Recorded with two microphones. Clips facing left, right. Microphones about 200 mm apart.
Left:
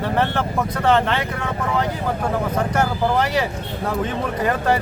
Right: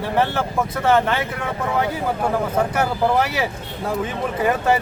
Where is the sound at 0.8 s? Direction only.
5° right (ahead or behind).